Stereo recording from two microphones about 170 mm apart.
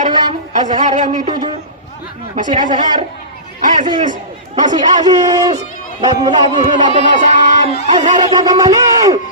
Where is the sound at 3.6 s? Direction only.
50° right (ahead or behind).